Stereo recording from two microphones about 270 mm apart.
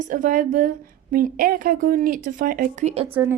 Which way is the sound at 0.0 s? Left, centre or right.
Right.